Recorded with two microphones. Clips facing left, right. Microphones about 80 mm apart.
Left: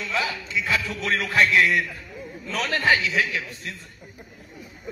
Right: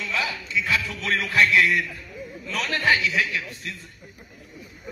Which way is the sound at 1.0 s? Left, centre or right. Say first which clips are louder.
Even; left.